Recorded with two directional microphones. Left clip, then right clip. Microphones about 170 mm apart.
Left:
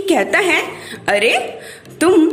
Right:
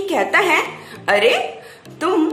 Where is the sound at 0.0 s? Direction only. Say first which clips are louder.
Left 2 dB; 20° left (ahead or behind).